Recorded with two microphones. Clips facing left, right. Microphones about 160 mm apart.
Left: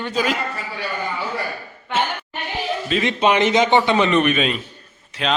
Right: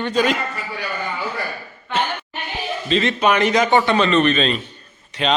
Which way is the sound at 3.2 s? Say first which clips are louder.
Left 2 dB; 25° left (ahead or behind).